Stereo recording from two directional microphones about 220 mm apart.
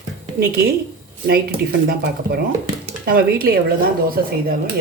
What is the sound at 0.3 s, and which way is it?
Speech, 45° right (ahead or behind).